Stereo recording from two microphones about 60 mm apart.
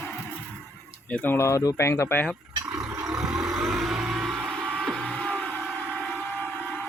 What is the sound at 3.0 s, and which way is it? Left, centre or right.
Vehicle, right.